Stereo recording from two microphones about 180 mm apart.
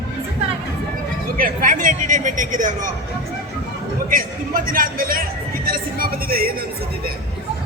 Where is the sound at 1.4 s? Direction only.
45° right (ahead or behind).